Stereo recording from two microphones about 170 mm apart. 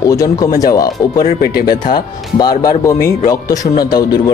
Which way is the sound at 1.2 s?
65° left (ahead or behind).